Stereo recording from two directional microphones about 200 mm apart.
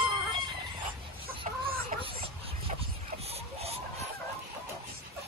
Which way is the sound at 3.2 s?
30° right (ahead or behind).